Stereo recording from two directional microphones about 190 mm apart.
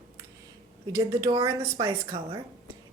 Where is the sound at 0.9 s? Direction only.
20° right (ahead or behind).